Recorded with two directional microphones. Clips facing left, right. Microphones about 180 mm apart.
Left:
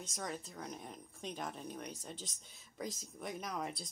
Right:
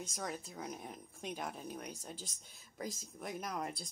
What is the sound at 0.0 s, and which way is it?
Speech, centre (ahead or behind).